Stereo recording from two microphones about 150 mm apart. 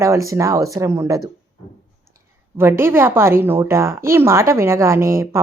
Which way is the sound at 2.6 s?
15° right (ahead or behind).